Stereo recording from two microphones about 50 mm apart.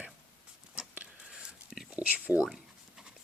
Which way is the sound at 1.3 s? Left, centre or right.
Centre.